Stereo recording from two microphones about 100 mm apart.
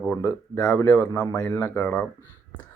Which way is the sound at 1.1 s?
40° left (ahead or behind).